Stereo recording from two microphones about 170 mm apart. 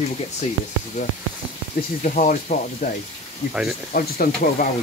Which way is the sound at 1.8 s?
60° left (ahead or behind).